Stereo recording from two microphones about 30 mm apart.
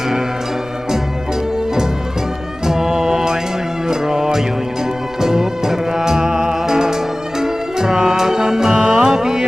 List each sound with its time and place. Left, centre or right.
2.6 s music: centre